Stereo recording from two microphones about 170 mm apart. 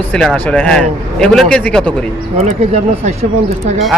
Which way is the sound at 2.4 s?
40° right (ahead or behind).